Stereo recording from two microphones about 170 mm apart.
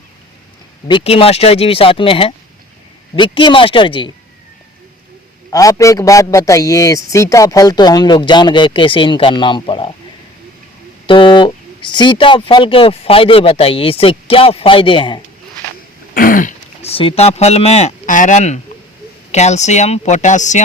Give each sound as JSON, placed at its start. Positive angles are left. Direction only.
{"t": 0.9, "sound": "a man's voice", "side_deg": 30}
{"t": 5.5, "sound": "a man's voice", "side_deg": 20}
{"t": 11.0, "sound": "speech", "side_deg": 30}
{"t": 16.1, "sound": "throat clearing", "side_deg": 55}
{"t": 16.8, "sound": "speech", "side_deg": 35}